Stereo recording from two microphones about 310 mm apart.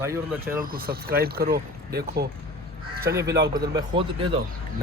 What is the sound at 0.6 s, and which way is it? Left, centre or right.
Speech, right.